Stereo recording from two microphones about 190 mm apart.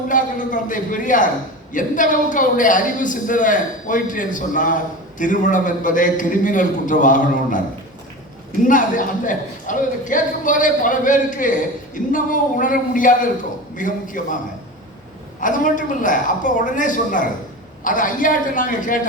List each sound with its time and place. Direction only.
0.1 s a man's voice: 45° left (ahead or behind)
8.6 s a man's voice: 45° left (ahead or behind)
15.4 s a man's voice: 45° left (ahead or behind)